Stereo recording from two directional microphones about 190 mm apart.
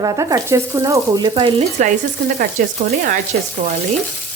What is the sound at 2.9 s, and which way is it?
Speech, 50° right (ahead or behind).